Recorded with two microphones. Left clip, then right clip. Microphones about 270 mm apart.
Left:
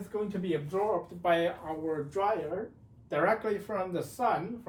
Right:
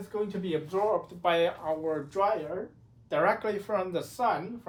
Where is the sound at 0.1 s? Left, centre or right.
Centre.